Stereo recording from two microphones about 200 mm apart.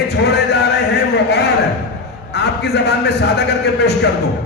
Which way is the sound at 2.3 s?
55° left (ahead or behind).